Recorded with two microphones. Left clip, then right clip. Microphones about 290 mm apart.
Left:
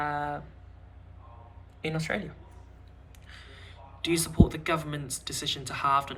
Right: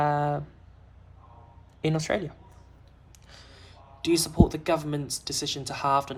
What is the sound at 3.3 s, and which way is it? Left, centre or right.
Speech, centre.